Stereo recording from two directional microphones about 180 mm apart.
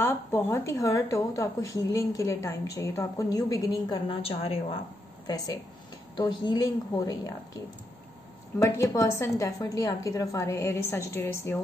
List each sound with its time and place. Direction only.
0.0 s speech: 15° left (ahead or behind); by 4.7 s 30° left (ahead or behind)
6.1 s a woman's voice: 25° left (ahead or behind)
8.5 s speech: 15° left (ahead or behind)